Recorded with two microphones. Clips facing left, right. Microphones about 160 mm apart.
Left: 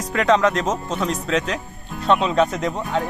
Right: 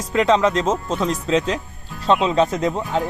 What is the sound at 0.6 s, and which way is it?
Speech, 30° right (ahead or behind).